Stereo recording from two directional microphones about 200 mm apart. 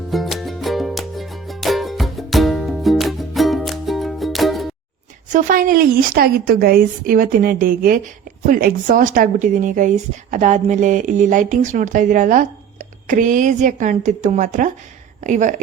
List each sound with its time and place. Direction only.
0.1 s music: centre (ahead or behind)
5.3 s a woman's voice: 40° right (ahead or behind)